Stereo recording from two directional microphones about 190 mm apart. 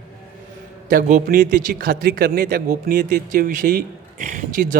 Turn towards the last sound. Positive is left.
turn(degrees=-55)  # may be behind; listen again after turning